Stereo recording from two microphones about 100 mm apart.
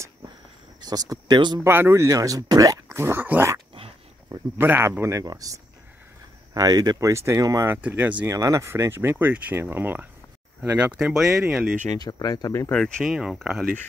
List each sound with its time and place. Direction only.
0.7 s speech: 40° right (ahead or behind)
1.6 s speech: 25° right (ahead or behind)
4.6 s speech: 20° right (ahead or behind)
5.2 s speech: 40° right (ahead or behind)
7.7 s speech: 20° right (ahead or behind)
8.3 s speech: 30° right (ahead or behind); by 11.7 s 5° right (ahead or behind)
12.0 s speech: 40° left (ahead or behind)
12.7 s speech: 5° left (ahead or behind)
13.0 s speech: 5° right (ahead or behind)